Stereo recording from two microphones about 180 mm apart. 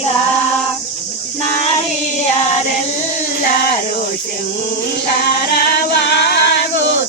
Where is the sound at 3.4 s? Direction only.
55° left (ahead or behind).